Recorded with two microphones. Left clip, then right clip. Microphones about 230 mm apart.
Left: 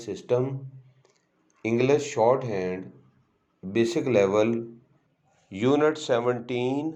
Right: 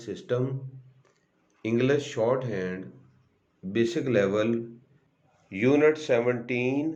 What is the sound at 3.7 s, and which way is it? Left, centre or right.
Speech, centre.